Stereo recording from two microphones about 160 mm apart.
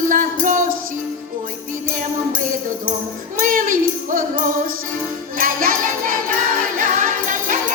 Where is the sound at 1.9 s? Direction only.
55° right (ahead or behind).